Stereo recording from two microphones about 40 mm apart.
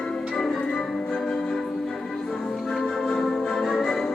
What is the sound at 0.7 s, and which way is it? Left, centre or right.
Music, centre.